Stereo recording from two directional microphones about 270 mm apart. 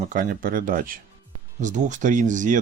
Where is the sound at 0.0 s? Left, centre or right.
Right.